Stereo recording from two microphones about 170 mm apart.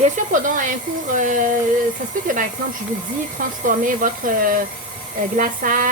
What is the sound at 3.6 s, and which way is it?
Speech, 50° right (ahead or behind).